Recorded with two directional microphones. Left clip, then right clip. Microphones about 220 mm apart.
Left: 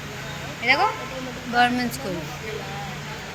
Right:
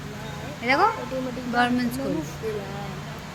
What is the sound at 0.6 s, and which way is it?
Speech, 20° right (ahead or behind).